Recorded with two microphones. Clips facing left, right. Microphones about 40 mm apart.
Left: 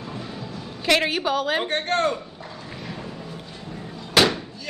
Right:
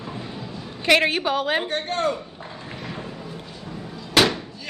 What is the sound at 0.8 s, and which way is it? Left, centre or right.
Speech, centre.